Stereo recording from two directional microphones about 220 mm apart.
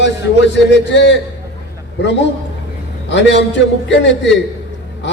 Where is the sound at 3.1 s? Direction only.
55° left (ahead or behind).